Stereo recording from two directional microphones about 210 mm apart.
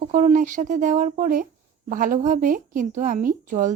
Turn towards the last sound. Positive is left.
turn(degrees=-40)  # may be behind; listen again after turning